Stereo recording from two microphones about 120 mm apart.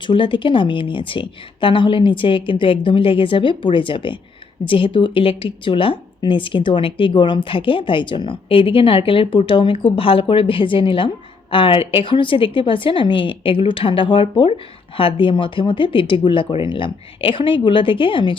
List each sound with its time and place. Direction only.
0.1 s a woman's voice: 45° left (ahead or behind)